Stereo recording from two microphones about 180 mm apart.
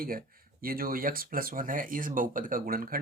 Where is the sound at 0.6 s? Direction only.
55° right (ahead or behind).